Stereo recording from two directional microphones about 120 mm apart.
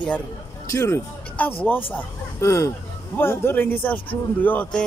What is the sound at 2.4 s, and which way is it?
A man's voice, 25° left (ahead or behind).